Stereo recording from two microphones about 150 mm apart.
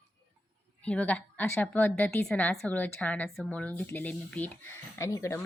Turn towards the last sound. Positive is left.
turn(degrees=20)  # may be behind; listen again after turning